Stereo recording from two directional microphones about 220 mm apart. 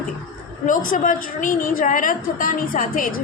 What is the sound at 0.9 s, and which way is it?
A woman's voice, 35° left (ahead or behind).